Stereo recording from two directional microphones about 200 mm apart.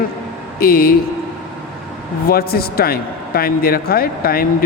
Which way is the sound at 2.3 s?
50° left (ahead or behind).